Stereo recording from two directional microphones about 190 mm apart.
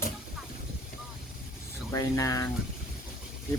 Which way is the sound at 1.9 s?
15° left (ahead or behind).